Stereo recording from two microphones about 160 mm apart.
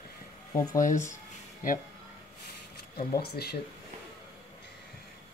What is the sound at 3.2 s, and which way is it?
Speech, 90° left.